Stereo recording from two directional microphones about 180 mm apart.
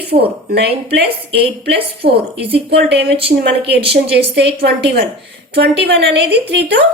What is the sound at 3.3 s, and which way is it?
Speech, 55° right (ahead or behind).